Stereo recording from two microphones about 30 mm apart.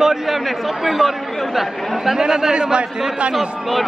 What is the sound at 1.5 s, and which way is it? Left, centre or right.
Speech, centre.